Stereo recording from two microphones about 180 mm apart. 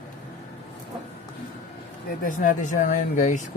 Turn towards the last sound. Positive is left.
turn(degrees=45)  # may be behind; listen again after turning